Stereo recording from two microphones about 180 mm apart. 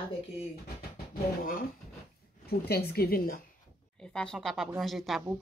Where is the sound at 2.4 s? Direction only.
60° left (ahead or behind).